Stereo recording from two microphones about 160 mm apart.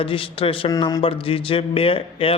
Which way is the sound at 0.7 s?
25° left (ahead or behind).